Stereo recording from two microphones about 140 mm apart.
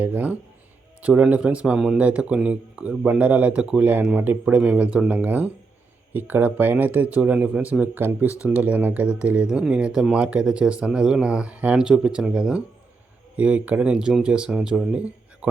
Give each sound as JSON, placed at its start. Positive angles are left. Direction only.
{"t": 0.0, "sound": "speech", "side_deg": -10}